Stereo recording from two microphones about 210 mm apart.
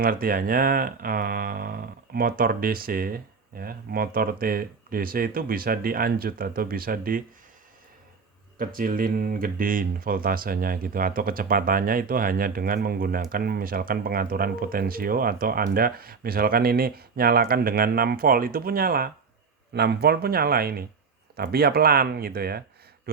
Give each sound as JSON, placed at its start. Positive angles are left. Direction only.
{"t": 0.0, "sound": "speech", "side_deg": -45}
{"t": 8.5, "sound": "speech", "side_deg": -40}